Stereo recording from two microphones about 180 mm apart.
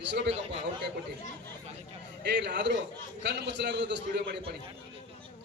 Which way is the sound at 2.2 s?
70° right (ahead or behind).